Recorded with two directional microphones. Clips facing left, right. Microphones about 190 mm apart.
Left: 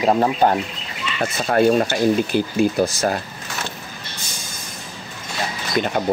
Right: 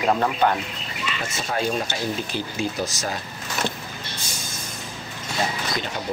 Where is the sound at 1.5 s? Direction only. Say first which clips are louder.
Left 10 dB; 60° left (ahead or behind).